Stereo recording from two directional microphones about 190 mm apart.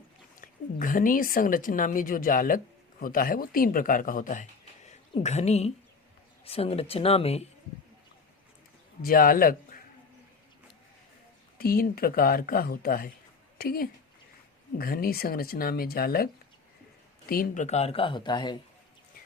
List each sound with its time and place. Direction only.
0.3 s a woman's voice: 45° left (ahead or behind)
9.0 s a man's voice: 50° left (ahead or behind)
11.5 s speech: 50° left (ahead or behind); by 18.5 s 25° left (ahead or behind)